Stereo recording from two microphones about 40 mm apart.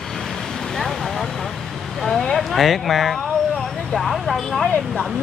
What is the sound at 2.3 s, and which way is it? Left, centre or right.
Speech, centre.